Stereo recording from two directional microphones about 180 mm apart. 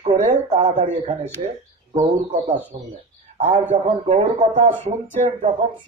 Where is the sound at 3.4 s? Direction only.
35° right (ahead or behind).